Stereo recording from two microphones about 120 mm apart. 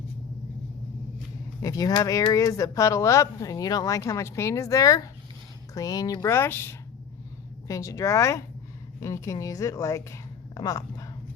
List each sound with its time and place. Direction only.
1.6 s speech: 30° left (ahead or behind)